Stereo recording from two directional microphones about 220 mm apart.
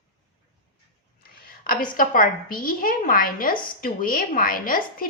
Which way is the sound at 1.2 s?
40° left (ahead or behind).